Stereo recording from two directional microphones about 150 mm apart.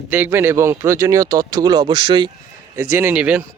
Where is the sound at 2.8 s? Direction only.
15° right (ahead or behind).